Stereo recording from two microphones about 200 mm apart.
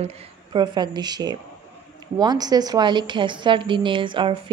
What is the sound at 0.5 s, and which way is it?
A woman's voice, 20° right (ahead or behind).